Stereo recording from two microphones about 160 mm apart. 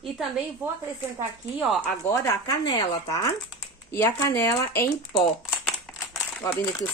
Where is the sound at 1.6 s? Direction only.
5° right (ahead or behind).